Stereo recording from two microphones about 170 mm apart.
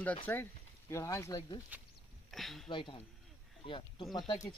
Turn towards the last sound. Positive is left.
turn(degrees=25)  # may be behind; listen again after turning